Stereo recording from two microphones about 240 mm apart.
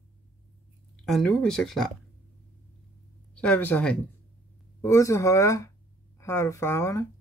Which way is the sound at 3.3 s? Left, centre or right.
Centre.